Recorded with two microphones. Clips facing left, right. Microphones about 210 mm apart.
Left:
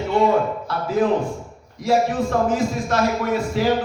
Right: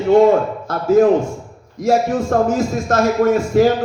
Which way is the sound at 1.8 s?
45° right (ahead or behind).